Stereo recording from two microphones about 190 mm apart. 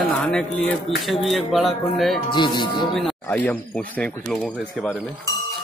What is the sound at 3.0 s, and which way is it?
A man's voice, 5° left (ahead or behind).